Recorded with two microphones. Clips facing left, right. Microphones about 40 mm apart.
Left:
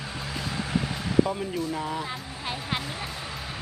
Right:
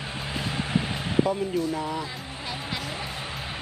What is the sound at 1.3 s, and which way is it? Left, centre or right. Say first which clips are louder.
Speech: right 3 dB; centre.